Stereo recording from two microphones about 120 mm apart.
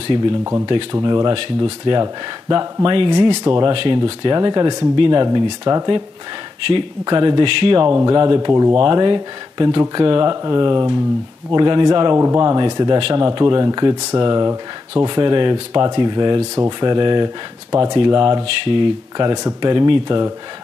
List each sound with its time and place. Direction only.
1.0 s speech: 35° right (ahead or behind)
3.7 s speech: 45° right (ahead or behind)
7.9 s speech: 30° right (ahead or behind)
8.5 s speech: 25° right (ahead or behind)
8.7 s speech: 40° right (ahead or behind)
12.2 s speech: 25° right (ahead or behind)